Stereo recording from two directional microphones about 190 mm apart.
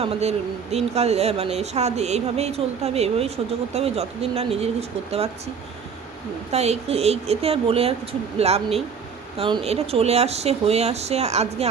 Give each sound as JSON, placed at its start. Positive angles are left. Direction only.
{"t": 0.0, "sound": "speech", "side_deg": -35}
{"t": 6.5, "sound": "speech", "side_deg": -35}